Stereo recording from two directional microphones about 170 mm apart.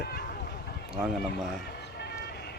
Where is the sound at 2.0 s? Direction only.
70° left (ahead or behind).